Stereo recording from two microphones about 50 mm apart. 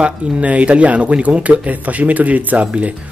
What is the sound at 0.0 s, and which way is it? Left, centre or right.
Speech, right.